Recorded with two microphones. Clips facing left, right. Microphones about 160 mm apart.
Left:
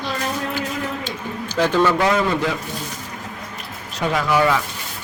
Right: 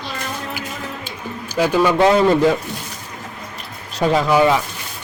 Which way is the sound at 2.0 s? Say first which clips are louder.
Right 5 dB; 30° right (ahead or behind).